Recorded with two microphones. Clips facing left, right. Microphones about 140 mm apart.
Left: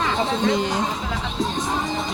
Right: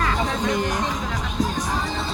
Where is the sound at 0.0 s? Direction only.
25° left (ahead or behind).